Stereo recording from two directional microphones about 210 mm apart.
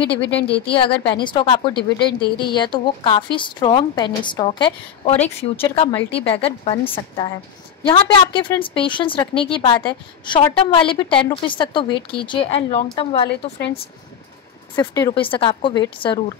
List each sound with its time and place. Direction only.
0.2 s a woman's voice: 25° left (ahead or behind)
14.8 s a woman's voice: 20° left (ahead or behind)